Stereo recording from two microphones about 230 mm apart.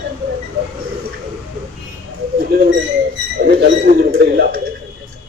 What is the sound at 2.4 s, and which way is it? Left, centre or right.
Bird, right.